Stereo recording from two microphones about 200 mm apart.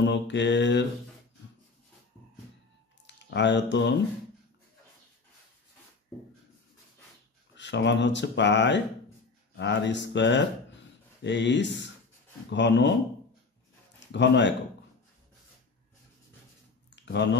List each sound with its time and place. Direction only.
0.0 s speech: 60° left (ahead or behind)
3.2 s speech: 60° left (ahead or behind)
7.5 s speech: 60° left (ahead or behind)
13.9 s speech: 60° left (ahead or behind)
16.9 s a sound: 60° left (ahead or behind)